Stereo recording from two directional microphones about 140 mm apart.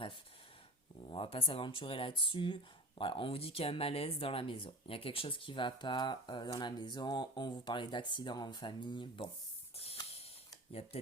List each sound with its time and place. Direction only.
1.0 s speech: 40° left (ahead or behind)
9.7 s a sound: 45° left (ahead or behind)
10.7 s speech: 45° left (ahead or behind)